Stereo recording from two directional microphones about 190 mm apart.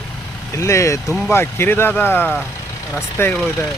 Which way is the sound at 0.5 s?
15° left (ahead or behind).